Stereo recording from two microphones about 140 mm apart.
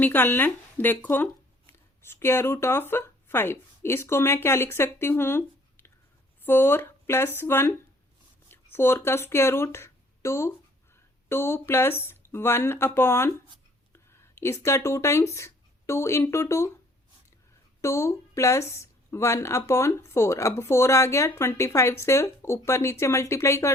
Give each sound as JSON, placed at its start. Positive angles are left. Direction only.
{"t": 0.0, "sound": "speech", "side_deg": 15}
{"t": 17.7, "sound": "speech", "side_deg": 20}